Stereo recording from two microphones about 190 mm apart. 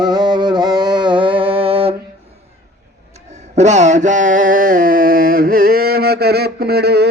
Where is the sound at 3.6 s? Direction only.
40° right (ahead or behind).